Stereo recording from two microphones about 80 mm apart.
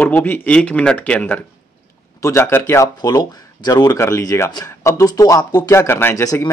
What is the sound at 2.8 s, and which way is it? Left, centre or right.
Speech, left.